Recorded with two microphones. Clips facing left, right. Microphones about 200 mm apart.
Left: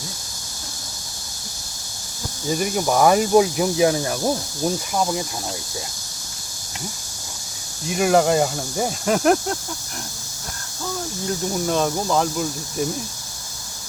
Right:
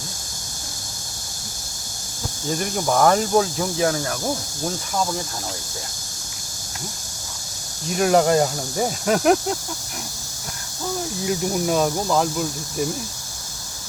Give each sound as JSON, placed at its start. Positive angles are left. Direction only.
{"t": 2.5, "sound": "speech", "side_deg": 5}
{"t": 7.9, "sound": "speech", "side_deg": 5}
{"t": 11.3, "sound": "speech", "side_deg": -10}